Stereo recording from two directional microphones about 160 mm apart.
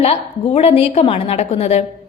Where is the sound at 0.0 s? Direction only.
40° left (ahead or behind).